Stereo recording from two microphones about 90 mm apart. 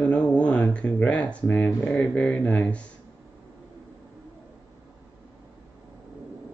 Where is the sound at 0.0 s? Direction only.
10° left (ahead or behind).